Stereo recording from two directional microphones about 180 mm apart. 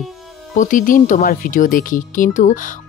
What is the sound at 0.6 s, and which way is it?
Speech, 45° left (ahead or behind).